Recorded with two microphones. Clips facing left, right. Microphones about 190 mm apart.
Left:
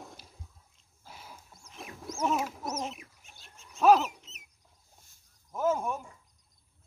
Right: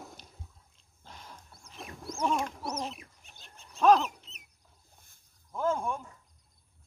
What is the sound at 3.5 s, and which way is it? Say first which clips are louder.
Bird: right 1 dB; 35° right (ahead or behind).